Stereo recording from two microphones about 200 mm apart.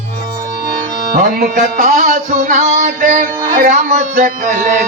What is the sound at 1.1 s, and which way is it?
Music, 40° right (ahead or behind).